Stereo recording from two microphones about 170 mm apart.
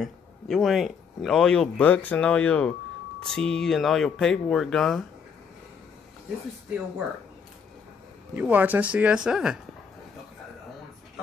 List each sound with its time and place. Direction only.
0.0 s speech: centre (ahead or behind)
8.4 s speech: 10° right (ahead or behind)